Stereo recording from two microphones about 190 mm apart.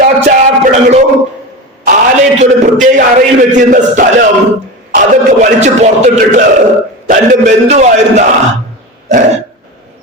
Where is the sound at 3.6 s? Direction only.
45° right (ahead or behind).